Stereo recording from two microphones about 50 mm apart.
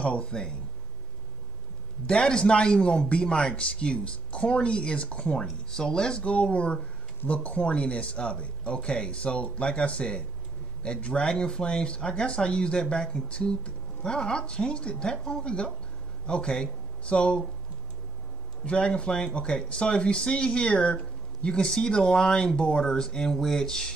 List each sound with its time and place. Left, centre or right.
0.0 s speech: left
2.0 s speech: centre
18.7 s speech: left